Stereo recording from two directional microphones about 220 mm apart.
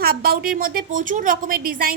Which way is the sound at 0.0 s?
45° right (ahead or behind).